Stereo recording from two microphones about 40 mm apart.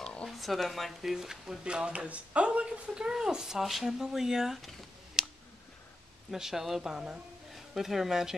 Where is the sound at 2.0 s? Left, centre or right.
Right.